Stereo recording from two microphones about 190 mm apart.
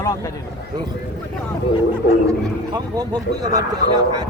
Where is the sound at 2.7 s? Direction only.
20° right (ahead or behind).